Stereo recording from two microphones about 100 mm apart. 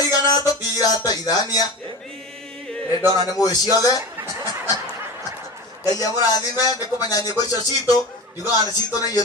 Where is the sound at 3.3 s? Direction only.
40° left (ahead or behind).